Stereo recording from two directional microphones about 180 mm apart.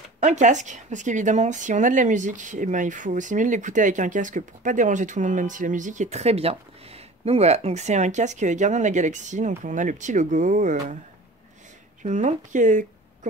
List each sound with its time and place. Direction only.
0.2 s speech: 40° right (ahead or behind)
12.0 s speech: 40° right (ahead or behind)